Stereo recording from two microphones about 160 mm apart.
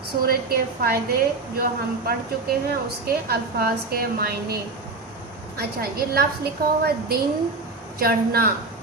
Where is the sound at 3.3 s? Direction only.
75° right (ahead or behind).